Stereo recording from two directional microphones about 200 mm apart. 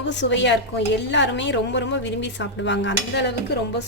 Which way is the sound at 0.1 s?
65° left (ahead or behind).